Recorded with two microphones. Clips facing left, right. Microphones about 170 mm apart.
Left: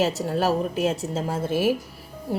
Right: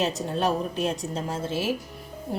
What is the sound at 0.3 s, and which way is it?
Speech, 5° left (ahead or behind).